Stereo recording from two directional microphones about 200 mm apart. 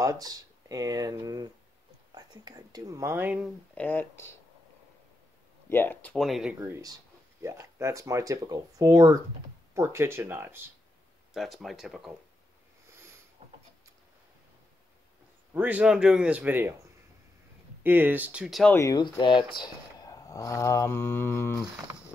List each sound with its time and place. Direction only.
0.0 s speech: 15° right (ahead or behind)
3.7 s speech: 10° left (ahead or behind)
5.7 s speech: 10° left (ahead or behind)
6.6 s speech: 15° right (ahead or behind)
11.3 s speech: centre (ahead or behind)
15.5 s speech: 10° right (ahead or behind)
17.8 s speech: 10° right (ahead or behind)
18.8 s speech: 20° left (ahead or behind)